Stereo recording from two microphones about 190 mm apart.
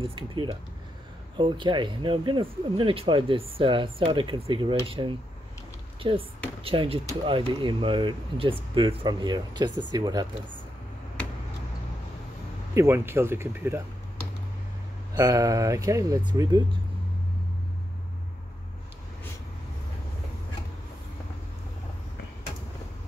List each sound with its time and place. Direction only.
0.0 s speech: 25° right (ahead or behind)
12.7 s speech: 15° right (ahead or behind)
15.1 s speech: 20° right (ahead or behind)